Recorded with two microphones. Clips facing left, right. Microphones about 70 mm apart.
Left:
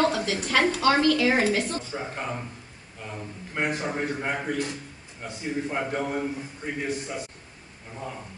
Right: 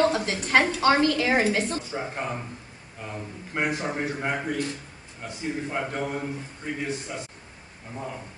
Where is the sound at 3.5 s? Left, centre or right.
Centre.